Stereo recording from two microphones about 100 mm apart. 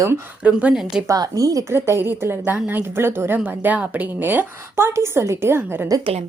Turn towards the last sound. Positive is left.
turn(degrees=-25)  # may be behind; listen again after turning